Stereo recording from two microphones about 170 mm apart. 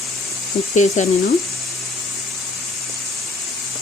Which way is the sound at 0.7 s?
45° left (ahead or behind).